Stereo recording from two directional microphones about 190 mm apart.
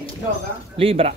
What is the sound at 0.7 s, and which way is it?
Speech, 30° right (ahead or behind).